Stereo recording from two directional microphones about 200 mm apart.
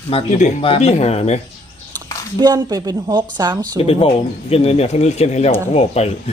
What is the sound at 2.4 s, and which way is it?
A woman's voice, 20° right (ahead or behind).